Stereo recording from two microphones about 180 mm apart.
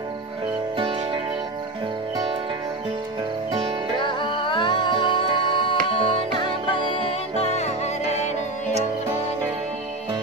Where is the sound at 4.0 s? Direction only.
25° left (ahead or behind).